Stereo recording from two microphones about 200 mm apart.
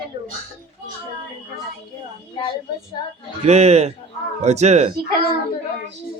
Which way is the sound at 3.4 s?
35° right (ahead or behind).